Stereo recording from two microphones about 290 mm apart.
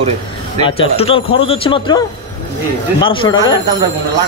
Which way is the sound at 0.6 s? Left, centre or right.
Centre.